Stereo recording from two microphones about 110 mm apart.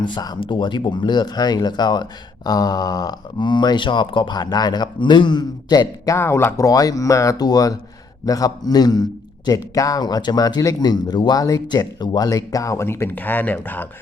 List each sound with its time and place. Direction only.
0.0 s speech: 40° left (ahead or behind)
0.3 s speech: 50° left (ahead or behind)
6.1 s speech: 25° left (ahead or behind)